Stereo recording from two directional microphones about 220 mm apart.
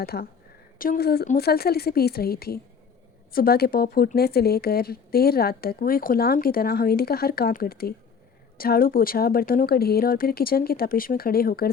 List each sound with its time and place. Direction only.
0.0 s speech: 45° left (ahead or behind)